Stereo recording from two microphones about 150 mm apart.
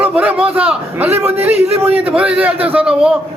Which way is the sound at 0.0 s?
10° right (ahead or behind).